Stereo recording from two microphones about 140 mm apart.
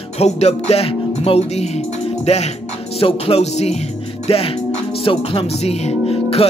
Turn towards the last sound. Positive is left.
turn(degrees=45)  # may be behind; listen again after turning